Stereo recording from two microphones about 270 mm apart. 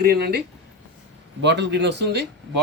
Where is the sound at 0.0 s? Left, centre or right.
Right.